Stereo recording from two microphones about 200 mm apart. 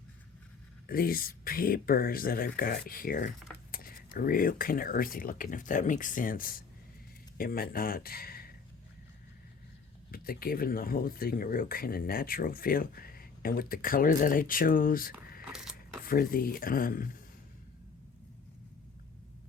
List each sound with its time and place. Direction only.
0.9 s speech: 45° left (ahead or behind)
10.1 s speech: 45° left (ahead or behind)
15.4 s a sound: 5° right (ahead or behind)
16.0 s speech: 45° left (ahead or behind)